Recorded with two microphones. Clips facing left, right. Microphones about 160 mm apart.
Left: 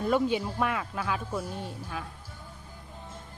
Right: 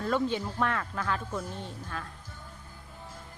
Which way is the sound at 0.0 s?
10° left (ahead or behind).